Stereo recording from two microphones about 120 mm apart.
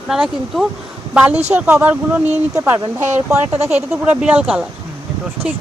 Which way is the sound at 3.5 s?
65° right (ahead or behind).